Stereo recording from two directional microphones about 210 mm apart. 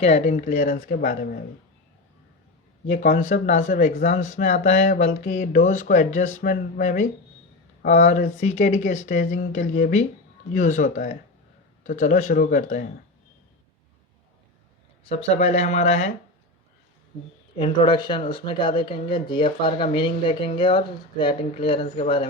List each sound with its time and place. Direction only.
0.0 s speech: 30° left (ahead or behind)
2.8 s speech: 35° left (ahead or behind)
15.0 s speech: 30° left (ahead or behind)
17.6 s speech: 20° left (ahead or behind)